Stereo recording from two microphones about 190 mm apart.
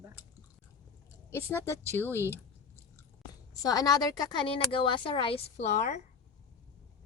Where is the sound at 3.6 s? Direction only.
20° left (ahead or behind); by 6.0 s 35° left (ahead or behind).